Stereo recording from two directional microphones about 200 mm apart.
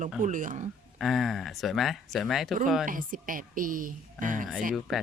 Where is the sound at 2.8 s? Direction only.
40° right (ahead or behind).